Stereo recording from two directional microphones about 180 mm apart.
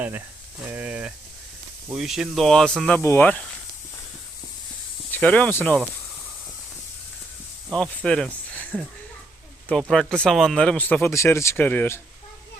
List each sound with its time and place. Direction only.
0.7 s speech: 10° right (ahead or behind); by 3.4 s 10° left (ahead or behind)
5.1 s speech: 10° left (ahead or behind)
7.7 s speech: 5° left (ahead or behind)